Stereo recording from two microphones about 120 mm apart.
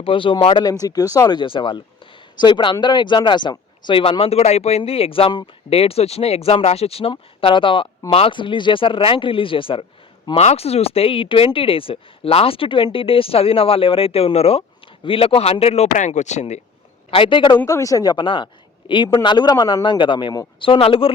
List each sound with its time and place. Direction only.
0.0 s speech: 45° left (ahead or behind)
0.6 s speech: 30° left (ahead or behind); by 7.1 s 55° left (ahead or behind)
7.1 s speech: 45° left (ahead or behind)
10.3 s speech: 60° left (ahead or behind)
17.1 s speech: 45° left (ahead or behind)
17.7 s speech: 30° left (ahead or behind); by 21.1 s 50° left (ahead or behind)